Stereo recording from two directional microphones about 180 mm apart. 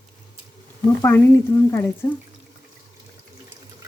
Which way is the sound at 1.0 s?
10° left (ahead or behind).